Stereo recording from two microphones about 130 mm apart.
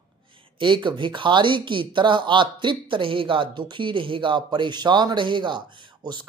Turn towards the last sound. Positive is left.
turn(degrees=-35)  # may be behind; listen again after turning